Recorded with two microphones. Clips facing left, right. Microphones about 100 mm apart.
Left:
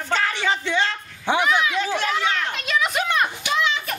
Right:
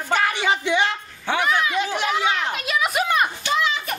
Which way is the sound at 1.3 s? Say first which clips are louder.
Left 2 dB; 15° left (ahead or behind).